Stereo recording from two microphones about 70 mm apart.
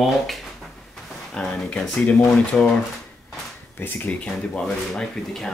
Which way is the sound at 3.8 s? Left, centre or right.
Left.